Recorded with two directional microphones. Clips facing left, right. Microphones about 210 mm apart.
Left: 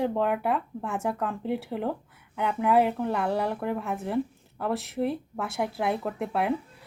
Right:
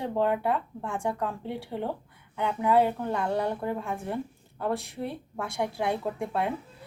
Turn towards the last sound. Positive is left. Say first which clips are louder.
# left 1 dB
turn(degrees=5)  # may be behind; listen again after turning